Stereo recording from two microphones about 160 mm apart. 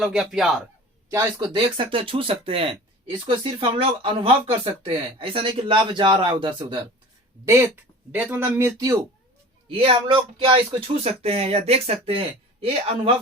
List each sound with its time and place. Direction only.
0.0 s a man's voice: centre (ahead or behind)
1.1 s speech: 20° right (ahead or behind)
1.7 s speech: 35° right (ahead or behind)
8.1 s speech: 10° right (ahead or behind)
9.6 s speech: 35° right (ahead or behind)